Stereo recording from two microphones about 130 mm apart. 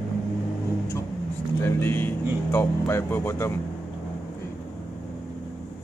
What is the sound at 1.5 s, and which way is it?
Speech, 20° left (ahead or behind).